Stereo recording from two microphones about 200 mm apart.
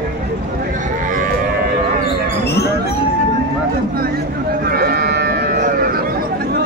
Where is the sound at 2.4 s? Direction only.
55° left (ahead or behind).